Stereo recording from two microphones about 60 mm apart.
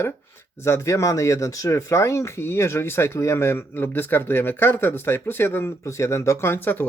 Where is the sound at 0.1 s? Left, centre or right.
Left.